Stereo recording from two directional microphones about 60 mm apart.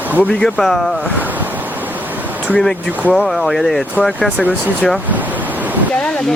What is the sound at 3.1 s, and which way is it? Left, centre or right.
Speech, centre.